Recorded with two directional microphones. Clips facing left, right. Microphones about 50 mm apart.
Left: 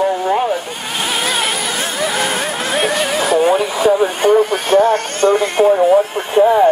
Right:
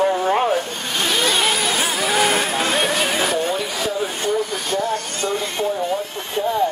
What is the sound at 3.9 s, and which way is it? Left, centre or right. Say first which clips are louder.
Speech: left 12 dB; left.